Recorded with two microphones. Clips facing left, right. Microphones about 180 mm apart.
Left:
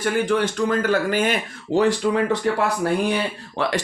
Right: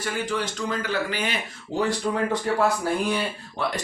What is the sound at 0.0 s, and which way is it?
Speech, 55° left (ahead or behind).